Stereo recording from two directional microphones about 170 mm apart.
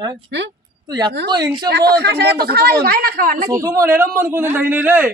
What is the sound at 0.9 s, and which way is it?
Speech, 25° right (ahead or behind).